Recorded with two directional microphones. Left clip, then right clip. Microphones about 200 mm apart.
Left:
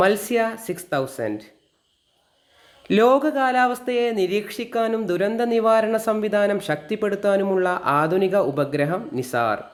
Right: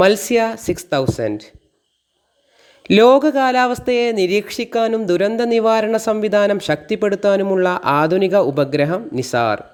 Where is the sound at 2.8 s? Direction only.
30° right (ahead or behind).